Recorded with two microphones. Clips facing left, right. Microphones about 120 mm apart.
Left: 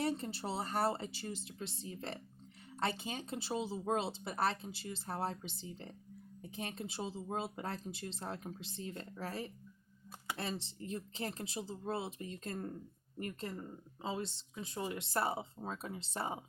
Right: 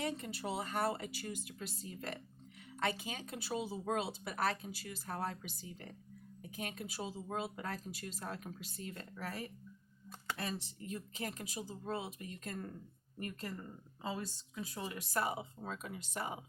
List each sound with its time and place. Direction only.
0.0 s speech: 30° left (ahead or behind)